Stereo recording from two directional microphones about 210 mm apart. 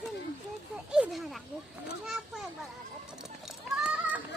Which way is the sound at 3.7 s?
5° right (ahead or behind).